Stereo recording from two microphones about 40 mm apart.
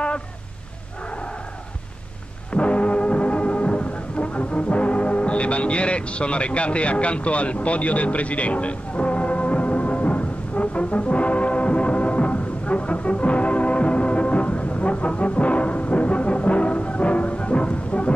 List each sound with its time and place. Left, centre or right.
2.5 s foghorn: left